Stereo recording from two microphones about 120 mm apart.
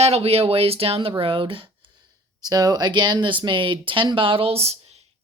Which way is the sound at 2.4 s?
35° right (ahead or behind).